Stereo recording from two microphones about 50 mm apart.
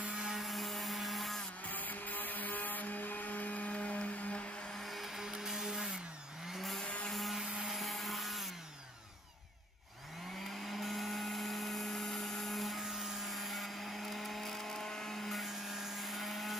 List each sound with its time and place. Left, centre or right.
0.1 s blender: centre
0.4 s blender: centre
1.7 s blender: left
4.7 s blender: centre
6.5 s a sound: centre
7.1 s blender: centre
7.6 s wood: centre
10.6 s dental drill: centre